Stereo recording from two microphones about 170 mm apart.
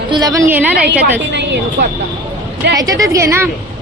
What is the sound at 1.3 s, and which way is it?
Speech, 90° right.